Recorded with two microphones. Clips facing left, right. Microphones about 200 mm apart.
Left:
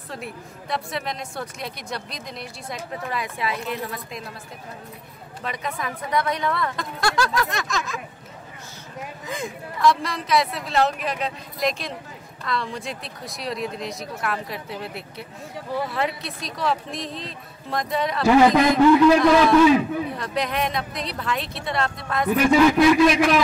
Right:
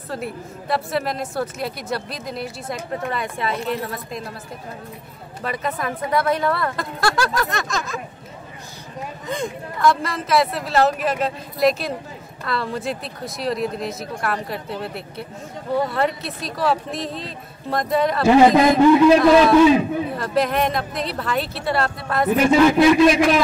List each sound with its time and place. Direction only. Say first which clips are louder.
0.1 s speech: right 6 dB; centre (ahead or behind)
5.4 s speech: right 4 dB; centre (ahead or behind)
9.3 s speech: right 5 dB; centre (ahead or behind)
18.2 s a man's voice: right 2 dB; 25° right (ahead or behind)
20.1 s speech: right 5 dB; centre (ahead or behind)
22.3 s a man's voice: right 2 dB; 25° right (ahead or behind)